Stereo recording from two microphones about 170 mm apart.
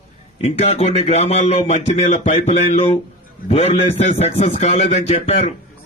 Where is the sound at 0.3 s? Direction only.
35° left (ahead or behind).